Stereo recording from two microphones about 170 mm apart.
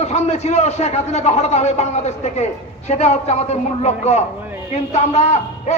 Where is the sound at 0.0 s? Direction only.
40° left (ahead or behind).